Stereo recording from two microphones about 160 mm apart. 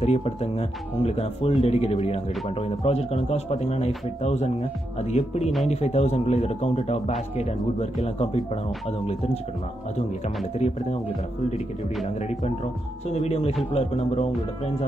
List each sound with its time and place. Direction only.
0.0 s speech: 40° left (ahead or behind)
9.9 s speech: 45° left (ahead or behind)
13.1 s speech: 40° left (ahead or behind)